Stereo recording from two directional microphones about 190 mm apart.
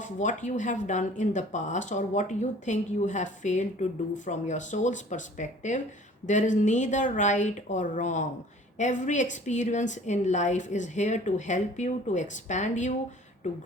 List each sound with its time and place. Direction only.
0.0 s a woman's voice: 40° left (ahead or behind)